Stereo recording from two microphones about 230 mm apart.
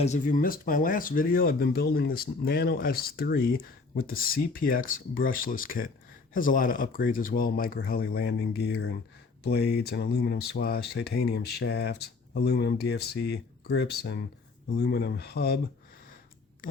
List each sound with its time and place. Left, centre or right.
0.0 s speech: left